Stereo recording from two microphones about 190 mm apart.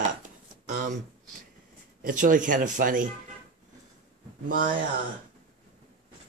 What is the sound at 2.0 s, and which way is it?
Speech, 45° right (ahead or behind).